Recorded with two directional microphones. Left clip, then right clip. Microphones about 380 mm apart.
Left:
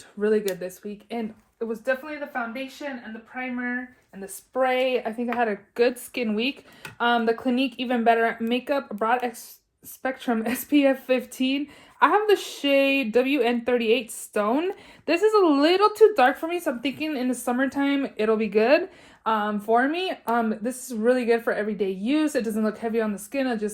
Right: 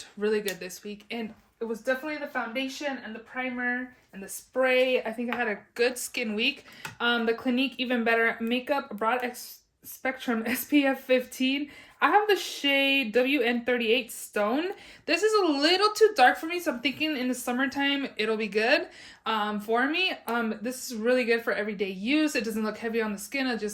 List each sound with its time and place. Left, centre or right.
0.2 s speech: centre
4.5 s speech: centre